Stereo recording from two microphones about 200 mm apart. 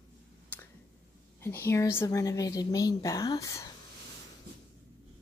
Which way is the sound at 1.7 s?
10° left (ahead or behind).